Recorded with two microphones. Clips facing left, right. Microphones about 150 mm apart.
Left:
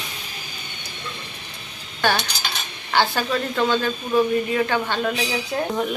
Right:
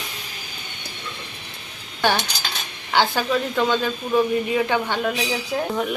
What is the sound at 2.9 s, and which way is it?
Speech, 15° right (ahead or behind).